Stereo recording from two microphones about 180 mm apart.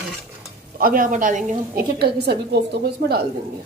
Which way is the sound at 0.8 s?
50° right (ahead or behind).